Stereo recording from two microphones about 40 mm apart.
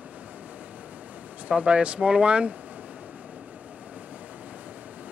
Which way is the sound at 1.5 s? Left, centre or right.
Right.